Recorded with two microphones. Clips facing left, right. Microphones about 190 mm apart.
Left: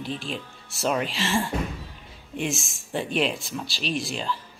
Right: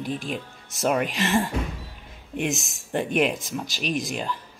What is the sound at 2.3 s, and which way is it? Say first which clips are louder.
Speech: right 2 dB; 65° right (ahead or behind).